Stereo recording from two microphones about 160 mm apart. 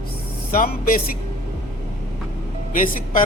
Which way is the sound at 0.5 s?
65° left (ahead or behind).